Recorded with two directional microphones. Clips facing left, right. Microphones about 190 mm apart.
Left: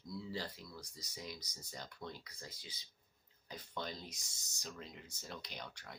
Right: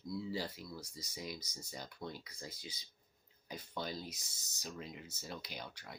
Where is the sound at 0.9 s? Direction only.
10° right (ahead or behind).